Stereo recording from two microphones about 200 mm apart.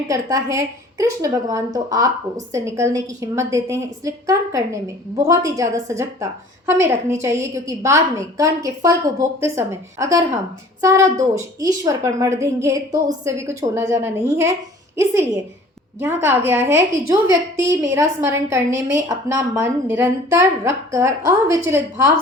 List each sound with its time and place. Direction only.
0.1 s a woman's voice: 15° right (ahead or behind)